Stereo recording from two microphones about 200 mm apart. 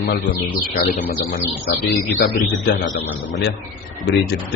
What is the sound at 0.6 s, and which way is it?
Speech, 40° left (ahead or behind).